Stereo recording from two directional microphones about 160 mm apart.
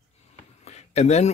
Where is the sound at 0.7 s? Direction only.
45° left (ahead or behind).